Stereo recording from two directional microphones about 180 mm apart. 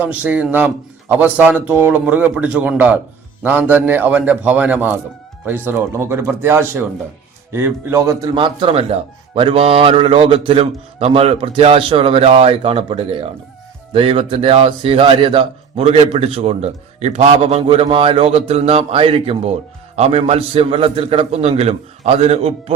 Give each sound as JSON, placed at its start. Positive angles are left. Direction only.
{"t": 0.0, "sound": "speech", "side_deg": -10}
{"t": 8.4, "sound": "a man's voice", "side_deg": -30}